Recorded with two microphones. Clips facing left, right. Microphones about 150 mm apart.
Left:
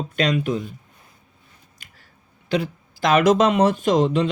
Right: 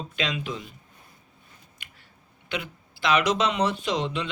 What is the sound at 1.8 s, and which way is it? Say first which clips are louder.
Chewing: right 1 dB; 40° left (ahead or behind).